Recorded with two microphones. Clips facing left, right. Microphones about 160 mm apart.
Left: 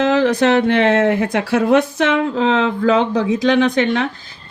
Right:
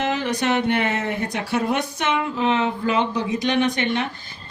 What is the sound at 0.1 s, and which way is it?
Speech, 90° left.